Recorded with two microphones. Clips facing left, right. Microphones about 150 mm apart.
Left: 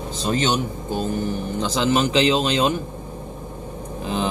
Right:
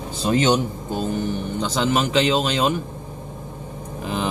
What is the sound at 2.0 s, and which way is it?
Speech, centre (ahead or behind).